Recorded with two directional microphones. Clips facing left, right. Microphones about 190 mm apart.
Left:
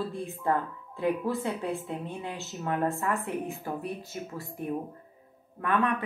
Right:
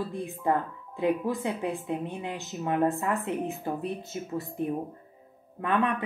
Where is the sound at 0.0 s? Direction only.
15° right (ahead or behind).